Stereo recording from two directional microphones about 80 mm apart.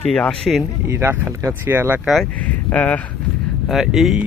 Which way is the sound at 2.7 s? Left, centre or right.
Centre.